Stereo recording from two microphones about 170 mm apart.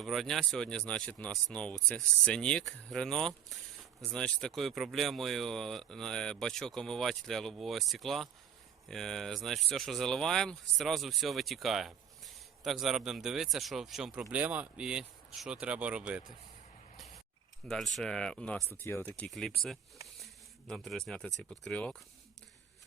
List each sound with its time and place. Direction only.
0.0 s speech: centre (ahead or behind)
17.7 s speech: centre (ahead or behind)
20.2 s a sound: centre (ahead or behind)
21.5 s speech: 5° left (ahead or behind)